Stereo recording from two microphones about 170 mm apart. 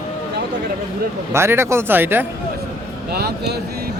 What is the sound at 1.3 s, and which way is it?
Speech, 15° right (ahead or behind).